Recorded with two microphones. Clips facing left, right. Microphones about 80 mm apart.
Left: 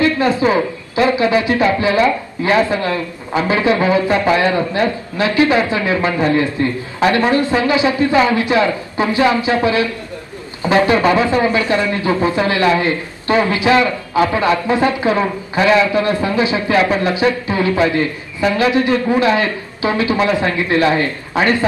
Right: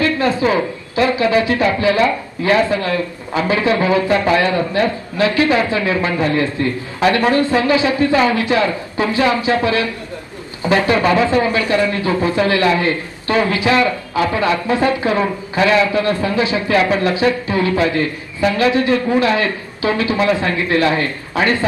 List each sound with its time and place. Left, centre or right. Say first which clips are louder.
0.0 s a man's voice: left 2 dB; left